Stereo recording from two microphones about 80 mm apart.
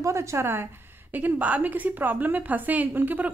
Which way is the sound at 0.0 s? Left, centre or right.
Right.